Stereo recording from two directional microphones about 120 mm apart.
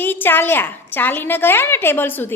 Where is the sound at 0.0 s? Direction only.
15° left (ahead or behind).